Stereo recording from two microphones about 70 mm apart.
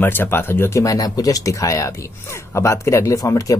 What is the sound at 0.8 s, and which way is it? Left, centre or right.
Speech, left.